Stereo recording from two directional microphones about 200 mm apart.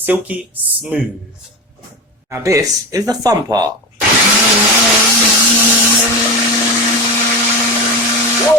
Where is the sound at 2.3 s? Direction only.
15° right (ahead or behind).